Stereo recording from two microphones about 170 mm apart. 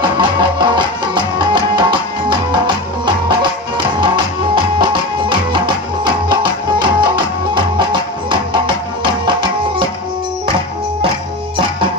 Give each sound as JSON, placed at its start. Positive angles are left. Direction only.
{"t": 0.2, "sound": "music", "side_deg": -25}
{"t": 4.0, "sound": "music", "side_deg": -25}